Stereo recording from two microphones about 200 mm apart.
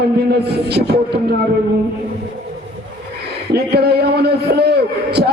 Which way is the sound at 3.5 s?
55° right (ahead or behind).